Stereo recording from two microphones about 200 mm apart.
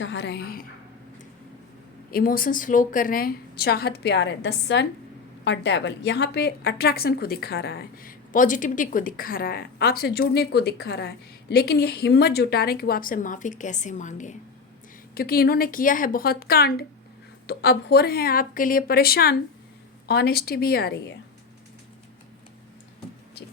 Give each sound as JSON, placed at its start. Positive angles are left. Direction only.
{"t": 0.0, "sound": "a woman's voice", "side_deg": 65}
{"t": 2.0, "sound": "a woman's voice", "side_deg": 45}
{"t": 15.1, "sound": "a woman's voice", "side_deg": 50}